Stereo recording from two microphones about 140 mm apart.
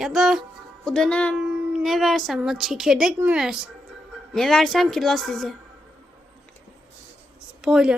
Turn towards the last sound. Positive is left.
turn(degrees=-5)  # may be behind; listen again after turning